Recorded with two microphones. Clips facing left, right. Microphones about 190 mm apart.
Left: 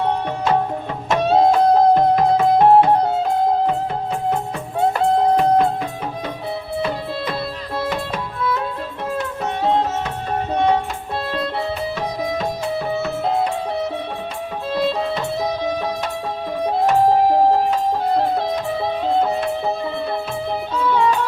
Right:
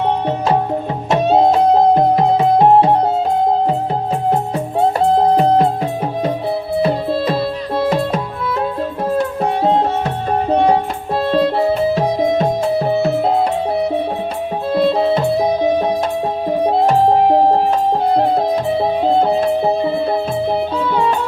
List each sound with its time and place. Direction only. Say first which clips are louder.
1.1 s music: right 2 dB; 20° right (ahead or behind)
4.8 s music: right 3 dB; 30° right (ahead or behind)
7.9 s music: right 7 dB; 40° right (ahead or behind)
14.8 s music: right 7 dB; 30° right (ahead or behind)
19.0 s music: right 4 dB; 30° right (ahead or behind)